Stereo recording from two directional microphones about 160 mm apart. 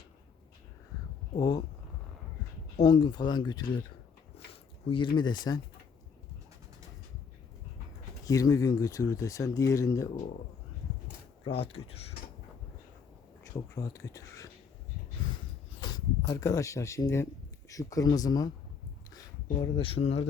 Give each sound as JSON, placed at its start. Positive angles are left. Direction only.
{"t": 1.4, "sound": "speech", "side_deg": 25}
{"t": 2.8, "sound": "speech", "side_deg": 30}
{"t": 4.9, "sound": "speech", "side_deg": 30}
{"t": 8.2, "sound": "speech", "side_deg": 20}
{"t": 11.4, "sound": "speech", "side_deg": 35}
{"t": 13.7, "sound": "speech", "side_deg": 20}
{"t": 15.8, "sound": "speech", "side_deg": 25}
{"t": 19.5, "sound": "speech", "side_deg": 35}